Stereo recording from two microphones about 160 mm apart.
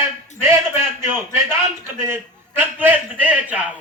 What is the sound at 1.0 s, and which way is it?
Speech, 15° right (ahead or behind).